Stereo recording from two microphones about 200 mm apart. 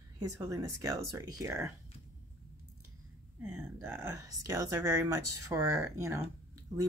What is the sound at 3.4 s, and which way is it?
Speech, 5° right (ahead or behind).